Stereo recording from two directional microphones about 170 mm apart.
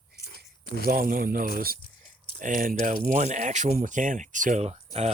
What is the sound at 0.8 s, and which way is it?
Speech, 55° right (ahead or behind).